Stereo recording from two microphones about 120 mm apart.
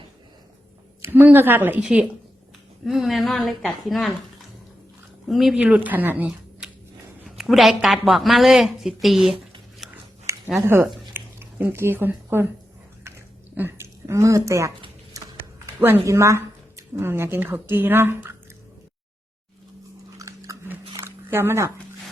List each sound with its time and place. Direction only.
1.0 s a woman's voice: 15° right (ahead or behind); by 4.1 s centre (ahead or behind)
5.3 s speech: centre (ahead or behind)
7.3 s speech: centre (ahead or behind)
9.8 s a sound: 5° right (ahead or behind)
10.3 s a sound: 25° right (ahead or behind)
11.1 s squish: 20° right (ahead or behind)
13.1 s a sound: 20° right (ahead or behind)
16.0 s a woman's voice: 25° right (ahead or behind)
20.1 s biting: 25° right (ahead or behind)